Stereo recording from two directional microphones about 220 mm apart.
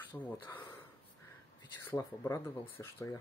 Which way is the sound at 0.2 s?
10° left (ahead or behind).